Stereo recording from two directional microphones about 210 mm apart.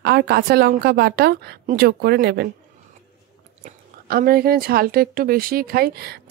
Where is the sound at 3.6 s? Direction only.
45° right (ahead or behind).